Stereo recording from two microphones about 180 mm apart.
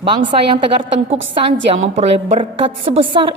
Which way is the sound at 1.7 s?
30° right (ahead or behind).